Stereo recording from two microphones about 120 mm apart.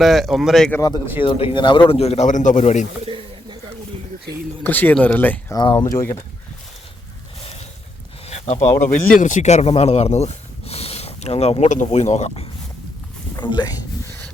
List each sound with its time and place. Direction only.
0.0 s speech: centre (ahead or behind)
1.2 s speech: 45° left (ahead or behind)
2.0 s a man's voice: 65° left (ahead or behind); by 2.8 s 80° left
3.1 s a sound: 45° right (ahead or behind)
4.6 s speech: 15° left (ahead or behind)
5.7 s speech: 25° left (ahead or behind)
8.3 s a sound: 70° left (ahead or behind)
8.9 s speech: 90° left; by 12.3 s 70° left (ahead or behind)
13.4 s speech: 40° left (ahead or behind)